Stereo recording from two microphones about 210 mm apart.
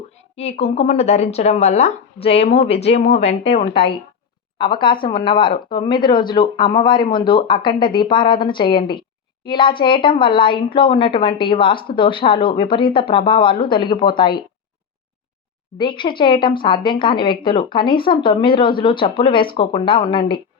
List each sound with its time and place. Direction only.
0.3 s a woman's voice: 30° left (ahead or behind)
15.8 s a woman's voice: 25° left (ahead or behind)